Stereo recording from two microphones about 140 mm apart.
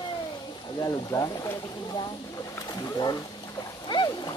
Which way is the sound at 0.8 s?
25° left (ahead or behind).